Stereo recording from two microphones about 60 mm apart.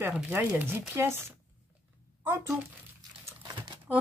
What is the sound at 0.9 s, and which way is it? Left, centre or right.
Speech, right.